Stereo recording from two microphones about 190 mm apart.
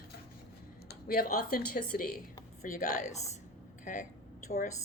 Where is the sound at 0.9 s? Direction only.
50° left (ahead or behind).